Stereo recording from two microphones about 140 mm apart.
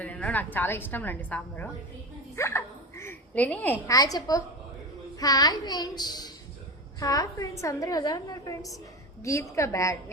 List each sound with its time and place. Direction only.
0.0 s a woman's voice: 10° left (ahead or behind)
2.3 s bow-wow: 20° left (ahead or behind)
3.8 s a woman's voice: 25° left (ahead or behind)